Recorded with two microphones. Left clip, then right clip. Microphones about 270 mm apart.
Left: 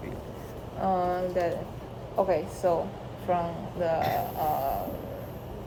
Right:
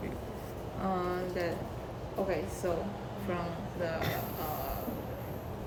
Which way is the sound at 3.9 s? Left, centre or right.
Centre.